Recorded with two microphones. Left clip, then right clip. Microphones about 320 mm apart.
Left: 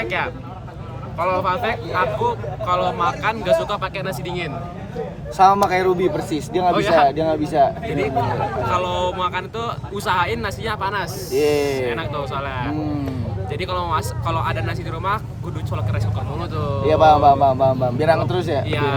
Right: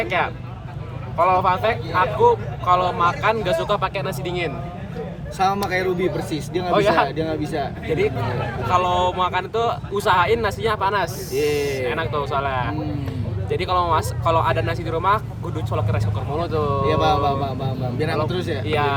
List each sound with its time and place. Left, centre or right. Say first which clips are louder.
0.0 s speech: right 1 dB; centre
5.4 s speech: left 6 dB; centre
6.7 s speech: right 2 dB; centre
7.0 s speech: left 5 dB; centre
8.7 s speech: right 6 dB; centre
11.3 s speech: left 3 dB; centre
11.9 s speech: right 1 dB; centre
16.4 s speech: right 5 dB; centre
16.8 s speech: left 9 dB; centre
18.7 s speech: right 1 dB; centre